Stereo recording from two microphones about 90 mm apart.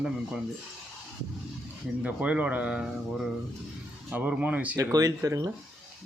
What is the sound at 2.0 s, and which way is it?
Speech, 15° right (ahead or behind).